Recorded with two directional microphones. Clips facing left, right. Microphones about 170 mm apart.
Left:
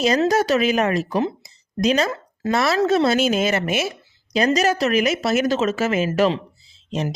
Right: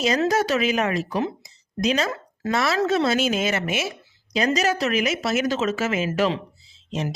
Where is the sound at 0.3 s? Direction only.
40° left (ahead or behind).